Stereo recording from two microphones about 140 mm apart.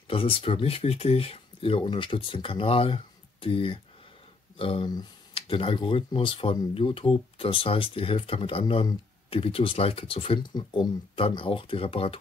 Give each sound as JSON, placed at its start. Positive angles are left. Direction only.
{"t": 0.1, "sound": "speech", "side_deg": 40}